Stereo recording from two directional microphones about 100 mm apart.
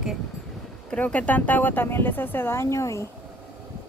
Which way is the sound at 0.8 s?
15° left (ahead or behind).